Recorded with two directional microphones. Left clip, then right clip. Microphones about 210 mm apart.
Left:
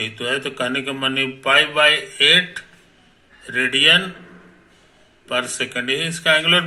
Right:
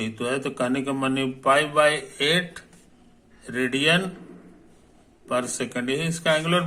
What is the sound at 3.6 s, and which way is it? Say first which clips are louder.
Speech: left 7 dB; 20° right (ahead or behind).